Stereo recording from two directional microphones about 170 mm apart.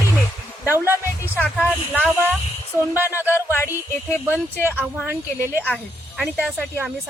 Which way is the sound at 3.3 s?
15° left (ahead or behind).